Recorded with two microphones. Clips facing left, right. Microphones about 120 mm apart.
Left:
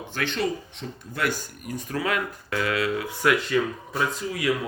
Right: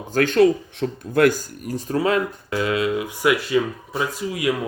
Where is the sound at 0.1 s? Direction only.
45° right (ahead or behind).